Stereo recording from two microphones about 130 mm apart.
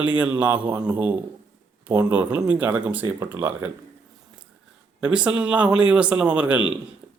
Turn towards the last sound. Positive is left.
turn(degrees=-10)  # may be behind; listen again after turning